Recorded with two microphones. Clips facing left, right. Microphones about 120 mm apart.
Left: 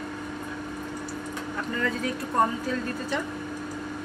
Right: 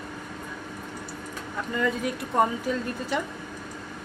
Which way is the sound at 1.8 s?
15° right (ahead or behind).